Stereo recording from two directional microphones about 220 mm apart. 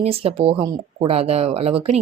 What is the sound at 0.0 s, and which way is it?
Speech, 25° right (ahead or behind).